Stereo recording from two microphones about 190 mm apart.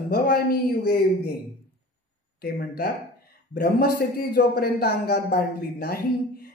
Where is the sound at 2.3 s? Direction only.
55° left (ahead or behind).